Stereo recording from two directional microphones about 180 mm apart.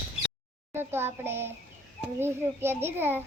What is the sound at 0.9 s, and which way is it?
Speech, 15° right (ahead or behind).